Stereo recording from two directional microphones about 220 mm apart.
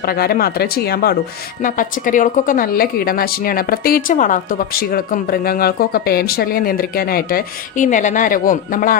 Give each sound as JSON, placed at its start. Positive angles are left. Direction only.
{"t": 0.0, "sound": "a woman's voice", "side_deg": 45}